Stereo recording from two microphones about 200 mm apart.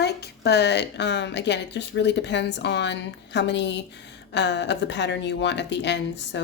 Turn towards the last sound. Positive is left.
turn(degrees=60)  # may be behind; listen again after turning